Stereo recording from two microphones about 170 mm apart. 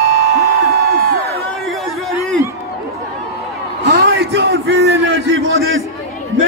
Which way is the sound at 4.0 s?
75° right (ahead or behind).